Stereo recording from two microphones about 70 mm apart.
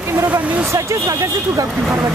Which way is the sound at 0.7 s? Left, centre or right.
Right.